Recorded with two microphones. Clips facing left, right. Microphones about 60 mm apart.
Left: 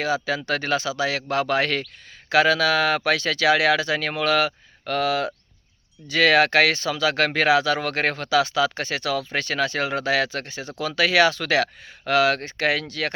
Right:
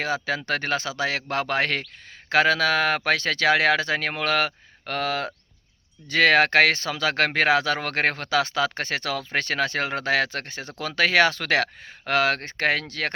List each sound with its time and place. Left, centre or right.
0.0 s speech: right